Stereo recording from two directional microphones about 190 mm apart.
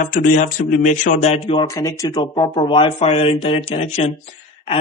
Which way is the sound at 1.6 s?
15° left (ahead or behind).